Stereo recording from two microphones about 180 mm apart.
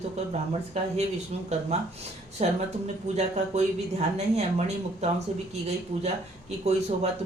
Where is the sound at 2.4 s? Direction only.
40° right (ahead or behind).